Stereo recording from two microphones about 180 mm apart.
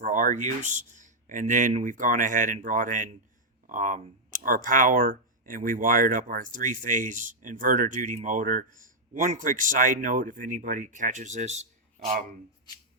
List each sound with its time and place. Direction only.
0.0 s speech: 45° right (ahead or behind)